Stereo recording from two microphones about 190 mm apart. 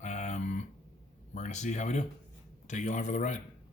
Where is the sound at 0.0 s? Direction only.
40° left (ahead or behind).